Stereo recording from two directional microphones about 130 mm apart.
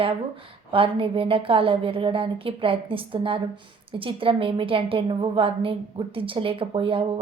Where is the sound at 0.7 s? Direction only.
45° right (ahead or behind).